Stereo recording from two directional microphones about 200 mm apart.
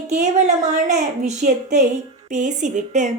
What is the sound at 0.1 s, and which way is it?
A woman's voice, 35° right (ahead or behind).